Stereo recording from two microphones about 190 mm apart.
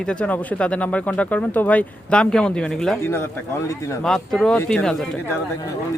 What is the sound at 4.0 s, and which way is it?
Speech, centre (ahead or behind).